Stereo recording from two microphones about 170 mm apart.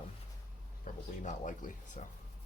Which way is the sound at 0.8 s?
50° left (ahead or behind).